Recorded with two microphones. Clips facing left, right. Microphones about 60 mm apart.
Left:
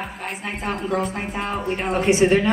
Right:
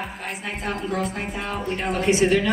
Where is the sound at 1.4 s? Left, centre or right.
Left.